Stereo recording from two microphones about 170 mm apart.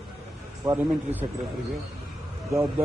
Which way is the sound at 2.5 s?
15° right (ahead or behind).